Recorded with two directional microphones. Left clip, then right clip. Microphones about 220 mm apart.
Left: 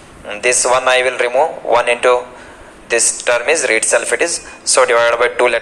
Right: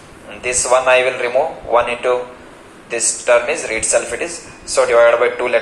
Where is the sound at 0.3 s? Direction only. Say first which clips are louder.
Left 3 dB; 50° left (ahead or behind).